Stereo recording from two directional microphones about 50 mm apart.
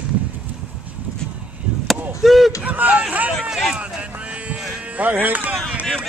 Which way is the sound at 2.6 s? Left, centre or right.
Right.